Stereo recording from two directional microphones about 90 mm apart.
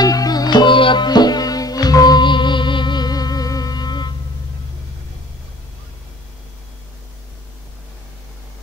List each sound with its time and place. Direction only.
0.0 s music: 45° left (ahead or behind)